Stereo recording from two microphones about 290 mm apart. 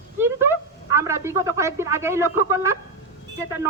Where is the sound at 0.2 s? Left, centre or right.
Centre.